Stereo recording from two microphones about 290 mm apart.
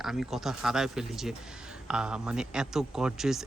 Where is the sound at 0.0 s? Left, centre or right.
Centre.